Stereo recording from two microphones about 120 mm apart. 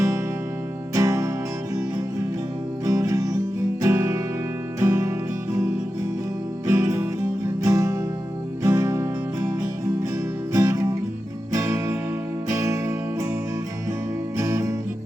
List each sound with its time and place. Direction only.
0.9 s music: 25° right (ahead or behind)
2.8 s music: 30° right (ahead or behind)
6.7 s music: 25° right (ahead or behind)
14.3 s music: 25° right (ahead or behind)